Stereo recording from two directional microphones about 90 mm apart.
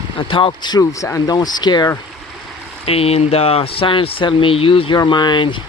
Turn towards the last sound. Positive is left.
turn(degrees=60)  # may be behind; listen again after turning